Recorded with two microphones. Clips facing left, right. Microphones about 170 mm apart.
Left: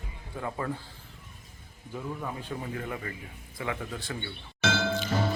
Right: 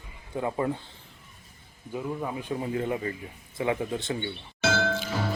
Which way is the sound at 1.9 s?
15° right (ahead or behind).